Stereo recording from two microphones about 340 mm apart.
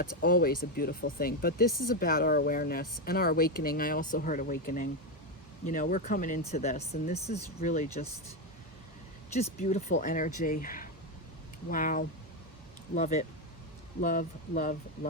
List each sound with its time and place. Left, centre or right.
0.0 s speech: left
9.3 s speech: centre